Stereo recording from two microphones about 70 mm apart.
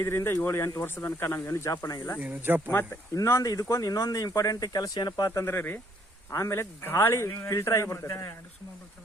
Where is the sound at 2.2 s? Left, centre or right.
Right.